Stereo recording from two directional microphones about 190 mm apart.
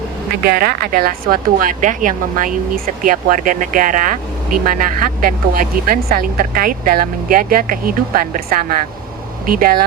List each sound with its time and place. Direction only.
0.4 s speech: 50° right (ahead or behind)